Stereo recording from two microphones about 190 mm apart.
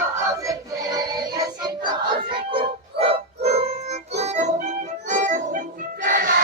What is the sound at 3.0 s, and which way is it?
Music, 55° right (ahead or behind).